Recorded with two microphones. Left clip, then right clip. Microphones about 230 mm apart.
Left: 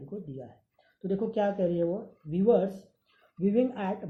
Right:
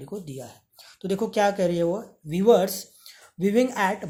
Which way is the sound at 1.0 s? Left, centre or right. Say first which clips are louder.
Right 6 dB; right.